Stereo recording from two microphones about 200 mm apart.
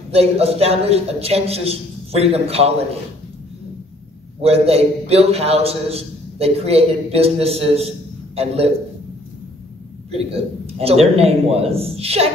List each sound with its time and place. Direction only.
0.1 s a man's voice: 30° right (ahead or behind)
4.4 s a man's voice: 30° right (ahead or behind)
10.1 s a man's voice: 30° right (ahead or behind)